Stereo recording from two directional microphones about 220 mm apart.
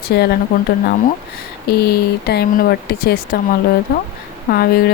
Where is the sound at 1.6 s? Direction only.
45° left (ahead or behind).